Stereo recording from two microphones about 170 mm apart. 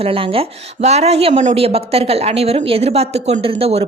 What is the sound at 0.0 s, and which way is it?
A woman's voice, 35° right (ahead or behind).